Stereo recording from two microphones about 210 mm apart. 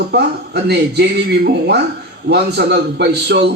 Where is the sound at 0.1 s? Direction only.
50° right (ahead or behind).